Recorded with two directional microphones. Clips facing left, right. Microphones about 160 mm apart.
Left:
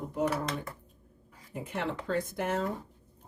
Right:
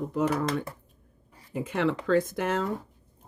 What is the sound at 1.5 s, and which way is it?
Speech, 90° right.